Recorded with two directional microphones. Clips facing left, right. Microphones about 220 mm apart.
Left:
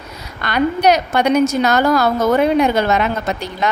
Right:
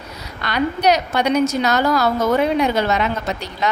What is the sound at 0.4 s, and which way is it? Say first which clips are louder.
A woman's voice: left 3 dB; 50° left (ahead or behind).